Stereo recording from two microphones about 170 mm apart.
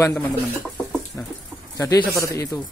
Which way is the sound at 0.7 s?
5° left (ahead or behind).